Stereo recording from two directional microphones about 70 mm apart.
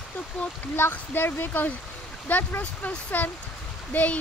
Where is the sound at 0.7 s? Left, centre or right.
Left.